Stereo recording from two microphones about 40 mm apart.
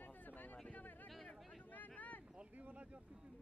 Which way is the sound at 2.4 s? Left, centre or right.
Right.